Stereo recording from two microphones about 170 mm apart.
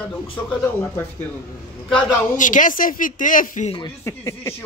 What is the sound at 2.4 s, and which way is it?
Speech, 50° left (ahead or behind).